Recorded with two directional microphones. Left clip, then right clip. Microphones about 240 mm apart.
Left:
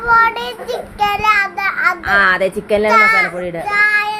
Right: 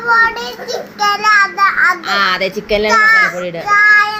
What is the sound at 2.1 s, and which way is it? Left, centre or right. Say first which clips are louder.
A child's voice: left 2 dB; left.